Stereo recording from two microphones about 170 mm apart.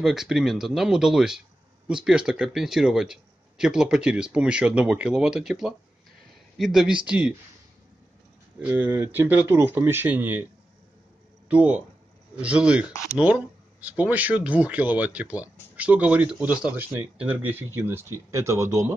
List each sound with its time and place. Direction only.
0.0 s speech: centre (ahead or behind)
8.5 s speech: 10° right (ahead or behind)
11.4 s speech: 10° right (ahead or behind)